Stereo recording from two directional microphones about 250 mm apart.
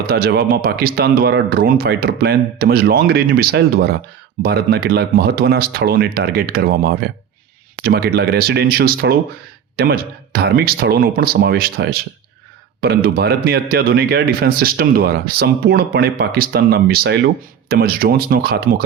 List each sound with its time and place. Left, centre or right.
0.0 s speech: right